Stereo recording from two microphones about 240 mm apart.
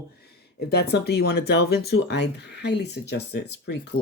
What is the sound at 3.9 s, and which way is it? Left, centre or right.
Speech, left.